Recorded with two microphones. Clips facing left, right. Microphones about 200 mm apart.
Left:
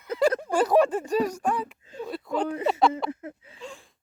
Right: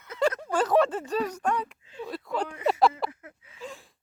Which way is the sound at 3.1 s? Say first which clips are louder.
Left 12 dB; 30° left (ahead or behind).